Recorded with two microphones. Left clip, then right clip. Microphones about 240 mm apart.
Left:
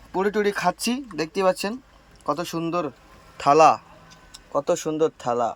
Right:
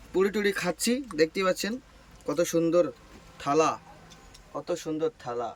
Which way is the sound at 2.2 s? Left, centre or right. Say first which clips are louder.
Left 1 dB; left.